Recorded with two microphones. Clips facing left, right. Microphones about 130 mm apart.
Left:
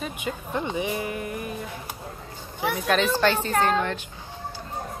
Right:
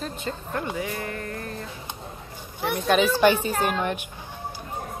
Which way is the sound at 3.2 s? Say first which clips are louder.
Right 1 dB; 15° right (ahead or behind).